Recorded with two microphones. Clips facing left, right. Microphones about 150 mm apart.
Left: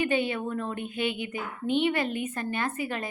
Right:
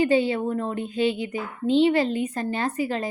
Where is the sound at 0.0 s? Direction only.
35° right (ahead or behind).